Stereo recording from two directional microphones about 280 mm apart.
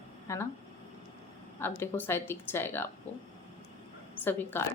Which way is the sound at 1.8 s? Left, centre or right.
Centre.